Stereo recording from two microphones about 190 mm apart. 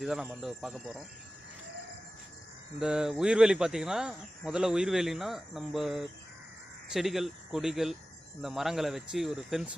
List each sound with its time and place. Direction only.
0.0 s speech: 5° right (ahead or behind)
2.7 s speech: 5° right (ahead or behind)